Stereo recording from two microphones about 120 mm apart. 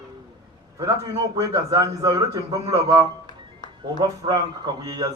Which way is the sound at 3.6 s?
40° left (ahead or behind).